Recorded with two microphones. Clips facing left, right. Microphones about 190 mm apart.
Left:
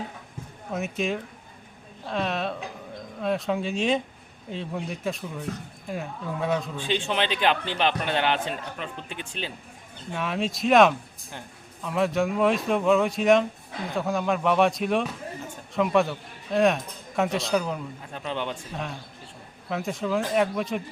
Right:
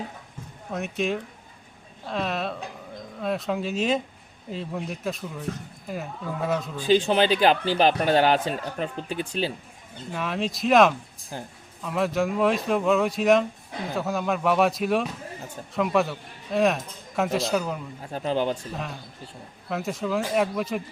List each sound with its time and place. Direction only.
0.7 s speech: centre (ahead or behind)
6.7 s a man's voice: 40° right (ahead or behind)
10.1 s speech: centre (ahead or behind)
11.3 s a man's voice: 35° right (ahead or behind)
11.8 s speech: centre (ahead or behind)
18.1 s a man's voice: 35° right (ahead or behind)
18.7 s speech: centre (ahead or behind)